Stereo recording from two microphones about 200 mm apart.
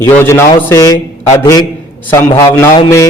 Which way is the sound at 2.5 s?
15° left (ahead or behind).